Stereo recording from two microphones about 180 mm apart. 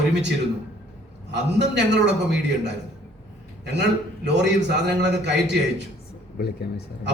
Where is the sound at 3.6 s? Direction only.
70° right (ahead or behind).